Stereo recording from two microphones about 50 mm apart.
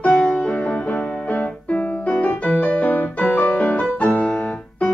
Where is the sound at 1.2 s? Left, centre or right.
Left.